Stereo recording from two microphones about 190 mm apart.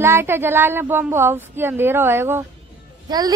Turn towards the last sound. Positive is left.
turn(degrees=-20)  # may be behind; listen again after turning